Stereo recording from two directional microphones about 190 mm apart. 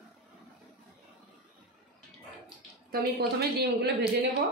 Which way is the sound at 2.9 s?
55° right (ahead or behind).